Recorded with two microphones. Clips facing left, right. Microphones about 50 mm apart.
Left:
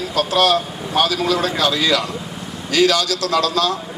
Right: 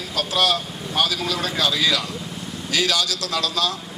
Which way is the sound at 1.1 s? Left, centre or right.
Centre.